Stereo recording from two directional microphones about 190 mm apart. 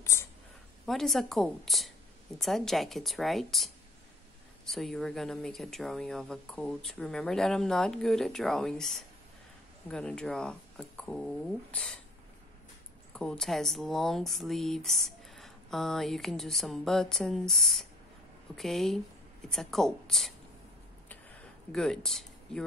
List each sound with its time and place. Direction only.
0.0 s a sound: 15° left (ahead or behind)
0.8 s speech: centre (ahead or behind)
13.1 s speech: 5° left (ahead or behind)
21.7 s speech: 5° left (ahead or behind)